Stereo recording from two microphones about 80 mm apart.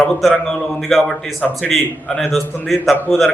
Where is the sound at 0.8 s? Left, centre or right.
Centre.